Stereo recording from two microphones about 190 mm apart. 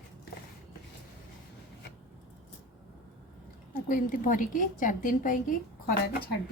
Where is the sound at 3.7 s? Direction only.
45° left (ahead or behind).